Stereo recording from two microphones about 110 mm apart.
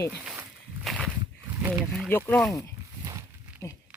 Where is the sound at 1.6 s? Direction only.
20° right (ahead or behind).